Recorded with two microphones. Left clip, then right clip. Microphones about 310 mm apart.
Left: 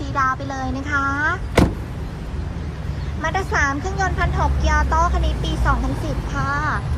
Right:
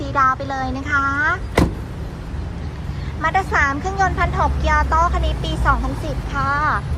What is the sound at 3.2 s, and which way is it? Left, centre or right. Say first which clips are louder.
A woman's voice: right 3 dB; centre.